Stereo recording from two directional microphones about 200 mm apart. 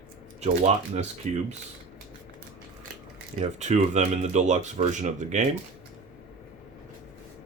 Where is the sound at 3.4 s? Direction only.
35° right (ahead or behind).